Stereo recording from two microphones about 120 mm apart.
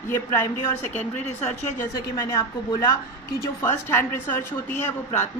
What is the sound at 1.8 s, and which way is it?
A woman's voice, 25° left (ahead or behind).